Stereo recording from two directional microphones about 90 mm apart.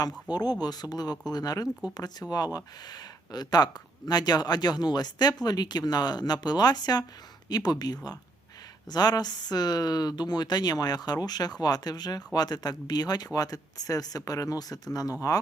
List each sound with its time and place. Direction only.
0.3 s speech: 50° left (ahead or behind)